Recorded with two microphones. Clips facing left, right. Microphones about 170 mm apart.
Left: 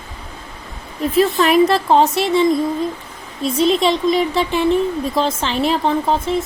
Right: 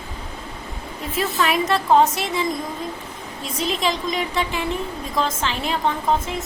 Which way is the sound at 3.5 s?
30° left (ahead or behind).